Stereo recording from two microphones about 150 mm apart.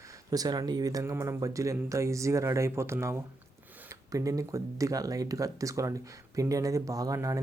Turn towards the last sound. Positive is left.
turn(degrees=-20)  # may be behind; listen again after turning